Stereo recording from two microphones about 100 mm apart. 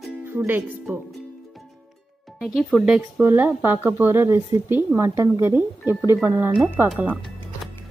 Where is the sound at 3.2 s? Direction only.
20° right (ahead or behind).